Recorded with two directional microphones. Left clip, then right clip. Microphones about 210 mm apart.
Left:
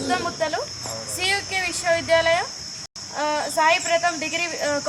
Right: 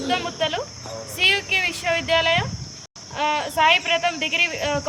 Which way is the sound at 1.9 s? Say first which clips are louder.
Left 2 dB; 10° right (ahead or behind).